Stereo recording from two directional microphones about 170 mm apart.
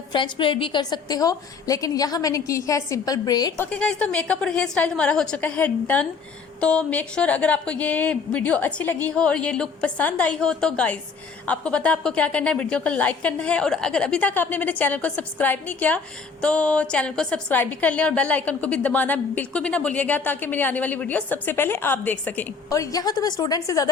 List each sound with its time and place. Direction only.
0.1 s a woman's voice: 30° left (ahead or behind)
3.6 s a woman's voice: 5° left (ahead or behind)